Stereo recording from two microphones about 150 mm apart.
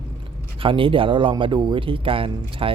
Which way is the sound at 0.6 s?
35° right (ahead or behind).